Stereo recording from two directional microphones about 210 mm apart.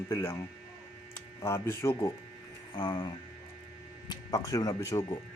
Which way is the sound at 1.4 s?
15° left (ahead or behind).